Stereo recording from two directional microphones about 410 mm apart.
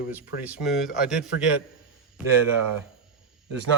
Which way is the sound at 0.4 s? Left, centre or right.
Centre.